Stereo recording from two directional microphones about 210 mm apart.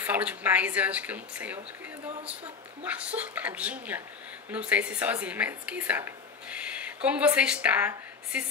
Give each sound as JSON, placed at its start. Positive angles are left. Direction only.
{"t": 0.0, "sound": "speech", "side_deg": -5}
{"t": 2.8, "sound": "speech", "side_deg": -5}